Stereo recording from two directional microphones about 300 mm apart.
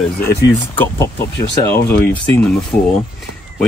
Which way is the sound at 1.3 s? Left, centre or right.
Left.